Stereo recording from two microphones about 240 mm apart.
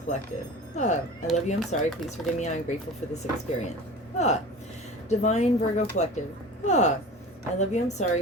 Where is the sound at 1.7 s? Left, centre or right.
Left.